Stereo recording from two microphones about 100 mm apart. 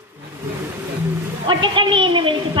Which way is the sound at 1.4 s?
55° right (ahead or behind).